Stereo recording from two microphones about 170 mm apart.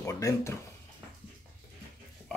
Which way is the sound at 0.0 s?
20° left (ahead or behind).